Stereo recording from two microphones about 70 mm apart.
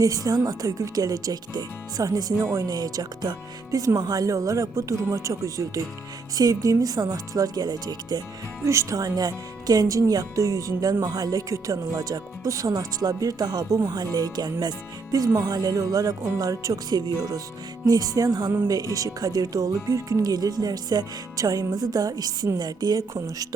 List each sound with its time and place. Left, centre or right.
0.0 s speech: right
2.3 s speech: right
2.6 s speech: right
8.6 s speech: right
20.2 s speech: right
22.5 s speech: right